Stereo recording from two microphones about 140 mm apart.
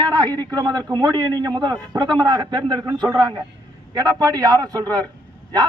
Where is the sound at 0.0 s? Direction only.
30° right (ahead or behind).